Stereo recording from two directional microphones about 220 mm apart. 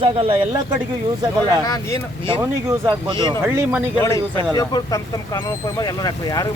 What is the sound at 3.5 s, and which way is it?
Speech, 10° right (ahead or behind).